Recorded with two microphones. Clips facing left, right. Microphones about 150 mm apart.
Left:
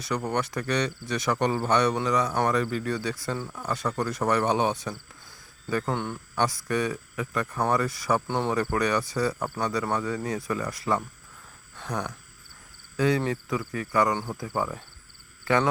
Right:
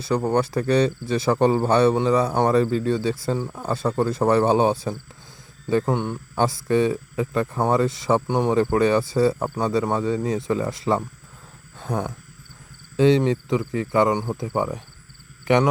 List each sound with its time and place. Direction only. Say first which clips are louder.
0.0 s speech: right 7 dB; 30° right (ahead or behind)